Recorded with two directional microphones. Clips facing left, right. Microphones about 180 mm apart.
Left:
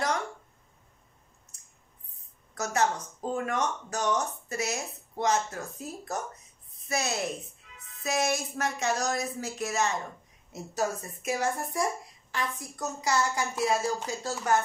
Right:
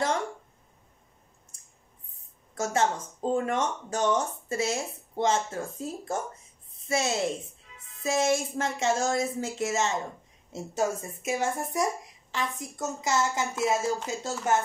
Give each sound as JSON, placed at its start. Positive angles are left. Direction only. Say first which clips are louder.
{"t": 2.5, "sound": "speech", "louder": "right 1 dB", "side_deg": -25}